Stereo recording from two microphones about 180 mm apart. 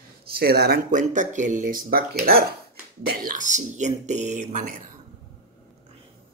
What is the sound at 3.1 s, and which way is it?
Speech, 50° right (ahead or behind).